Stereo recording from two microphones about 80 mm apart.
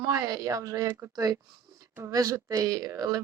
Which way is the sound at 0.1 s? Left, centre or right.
Right.